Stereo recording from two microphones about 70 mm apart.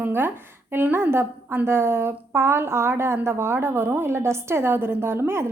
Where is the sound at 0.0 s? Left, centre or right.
Right.